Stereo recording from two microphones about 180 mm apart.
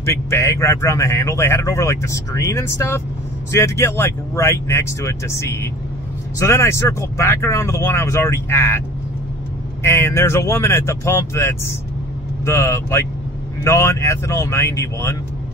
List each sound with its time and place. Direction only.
0.0 s speech: 15° left (ahead or behind)
9.8 s speech: 15° left (ahead or behind)